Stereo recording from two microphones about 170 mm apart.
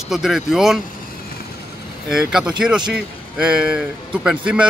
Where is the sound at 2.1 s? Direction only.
5° right (ahead or behind).